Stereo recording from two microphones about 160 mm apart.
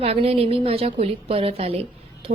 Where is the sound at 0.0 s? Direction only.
40° right (ahead or behind).